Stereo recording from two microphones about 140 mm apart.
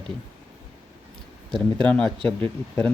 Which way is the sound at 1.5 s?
5° left (ahead or behind).